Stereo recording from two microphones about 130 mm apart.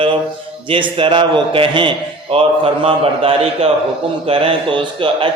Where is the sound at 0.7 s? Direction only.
40° right (ahead or behind).